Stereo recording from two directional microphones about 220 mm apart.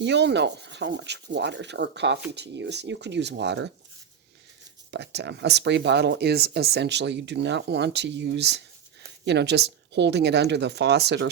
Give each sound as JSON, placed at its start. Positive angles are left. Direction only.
{"t": 0.0, "sound": "speech", "side_deg": -50}
{"t": 4.9, "sound": "speech", "side_deg": -50}